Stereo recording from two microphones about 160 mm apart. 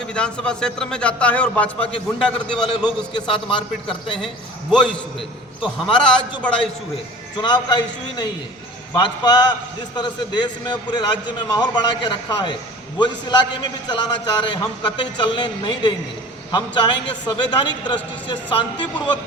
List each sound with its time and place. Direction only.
0.1 s a man's voice: 5° left (ahead or behind)
2.6 s a man's voice: 30° left (ahead or behind)
4.7 s a man's voice: 5° left (ahead or behind)
7.4 s a man's voice: 30° left (ahead or behind)